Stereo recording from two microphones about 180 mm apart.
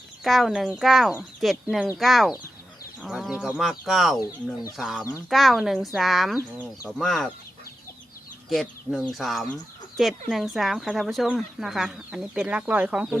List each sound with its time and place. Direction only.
0.3 s speech: centre (ahead or behind)
8.9 s speech: centre (ahead or behind)